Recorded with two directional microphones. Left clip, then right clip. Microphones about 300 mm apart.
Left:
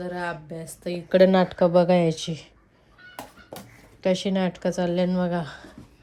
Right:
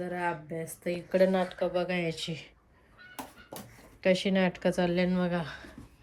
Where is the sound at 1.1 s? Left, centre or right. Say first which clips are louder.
Left 8 dB; left; by 2.5 s centre.